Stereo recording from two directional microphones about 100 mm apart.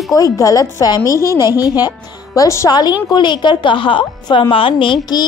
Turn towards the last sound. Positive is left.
turn(degrees=55)  # may be behind; listen again after turning